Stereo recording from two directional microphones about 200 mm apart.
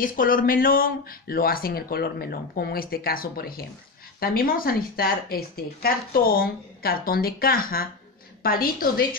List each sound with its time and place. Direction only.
0.0 s speech: 45° left (ahead or behind)